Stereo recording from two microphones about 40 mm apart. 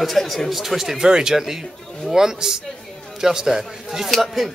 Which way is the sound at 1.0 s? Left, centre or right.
Right.